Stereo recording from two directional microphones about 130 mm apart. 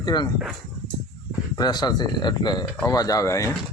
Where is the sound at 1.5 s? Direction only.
30° left (ahead or behind).